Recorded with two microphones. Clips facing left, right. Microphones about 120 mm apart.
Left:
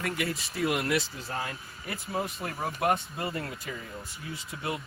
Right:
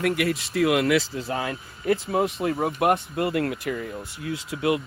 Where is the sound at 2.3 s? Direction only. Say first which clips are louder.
Right 9 dB; 60° right (ahead or behind); by 4.8 s 90° right.